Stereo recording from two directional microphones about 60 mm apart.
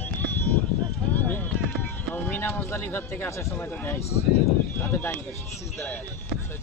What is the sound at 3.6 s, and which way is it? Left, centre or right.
Speech, left.